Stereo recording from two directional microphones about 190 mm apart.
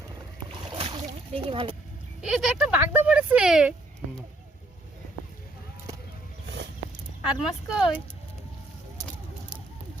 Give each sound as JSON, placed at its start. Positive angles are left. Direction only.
{"t": 0.7, "sound": "splash", "side_deg": -25}
{"t": 2.2, "sound": "speech", "side_deg": -5}
{"t": 7.3, "sound": "speech", "side_deg": -5}